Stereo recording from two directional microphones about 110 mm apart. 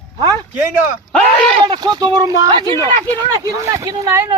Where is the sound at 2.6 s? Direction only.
30° left (ahead or behind).